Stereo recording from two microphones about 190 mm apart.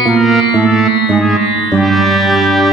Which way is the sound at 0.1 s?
Centre (ahead or behind).